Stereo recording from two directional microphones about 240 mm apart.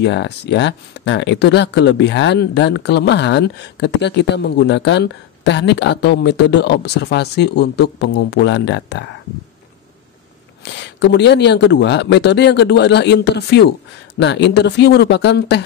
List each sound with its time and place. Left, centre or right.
0.0 s speech: left
10.7 s speech: left